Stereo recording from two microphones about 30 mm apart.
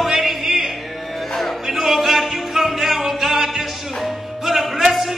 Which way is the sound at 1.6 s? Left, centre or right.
Centre.